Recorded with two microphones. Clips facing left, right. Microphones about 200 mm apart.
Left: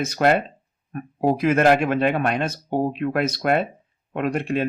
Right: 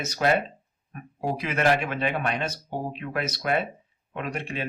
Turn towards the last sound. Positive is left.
turn(degrees=50)  # may be behind; listen again after turning